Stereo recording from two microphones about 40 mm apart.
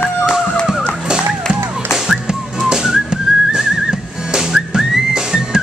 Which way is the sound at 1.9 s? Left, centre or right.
Centre.